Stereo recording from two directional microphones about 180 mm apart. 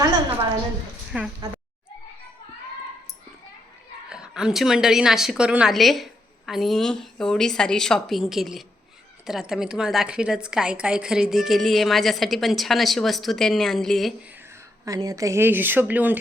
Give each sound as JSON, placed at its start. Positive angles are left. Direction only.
{"t": 0.0, "sound": "a sound", "side_deg": -30}
{"t": 1.1, "sound": "a woman's voice", "side_deg": -5}
{"t": 4.1, "sound": "a woman's voice", "side_deg": -5}
{"t": 14.8, "sound": "speech", "side_deg": -20}